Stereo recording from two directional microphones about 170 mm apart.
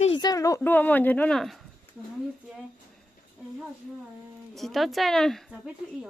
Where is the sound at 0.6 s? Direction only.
10° left (ahead or behind).